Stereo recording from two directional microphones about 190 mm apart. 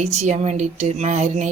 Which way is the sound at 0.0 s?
35° right (ahead or behind).